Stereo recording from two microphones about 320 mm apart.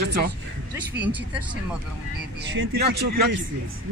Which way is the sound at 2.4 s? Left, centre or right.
Right.